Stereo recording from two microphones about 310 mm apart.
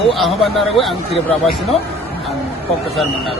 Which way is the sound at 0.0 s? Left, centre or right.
Centre.